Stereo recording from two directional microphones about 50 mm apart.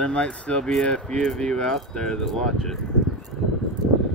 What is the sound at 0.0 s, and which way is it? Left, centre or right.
Speech, left.